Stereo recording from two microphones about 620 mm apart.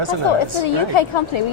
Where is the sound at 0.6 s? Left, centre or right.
Left.